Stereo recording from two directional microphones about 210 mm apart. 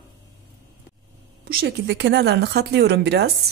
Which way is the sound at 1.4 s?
45° right (ahead or behind).